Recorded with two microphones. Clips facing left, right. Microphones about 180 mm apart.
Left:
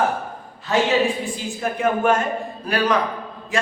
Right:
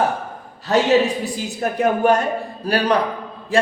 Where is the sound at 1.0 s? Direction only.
75° right (ahead or behind).